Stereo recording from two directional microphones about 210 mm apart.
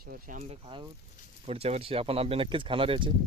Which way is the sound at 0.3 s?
30° right (ahead or behind).